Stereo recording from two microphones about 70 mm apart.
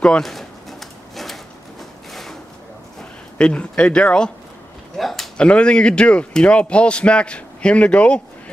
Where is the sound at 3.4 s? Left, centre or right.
Centre.